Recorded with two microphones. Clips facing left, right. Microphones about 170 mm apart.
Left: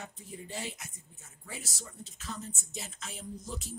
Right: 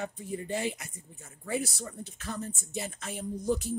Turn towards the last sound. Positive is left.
turn(degrees=-60)  # may be behind; listen again after turning